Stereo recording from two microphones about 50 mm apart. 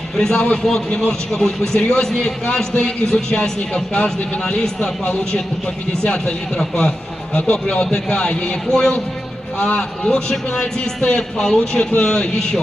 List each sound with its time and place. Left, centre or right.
0.2 s a man's voice: centre